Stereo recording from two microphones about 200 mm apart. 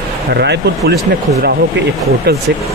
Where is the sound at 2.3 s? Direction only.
55° right (ahead or behind).